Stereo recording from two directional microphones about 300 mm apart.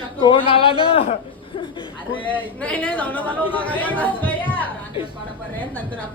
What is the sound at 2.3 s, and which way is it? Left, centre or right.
A woman's voice, centre.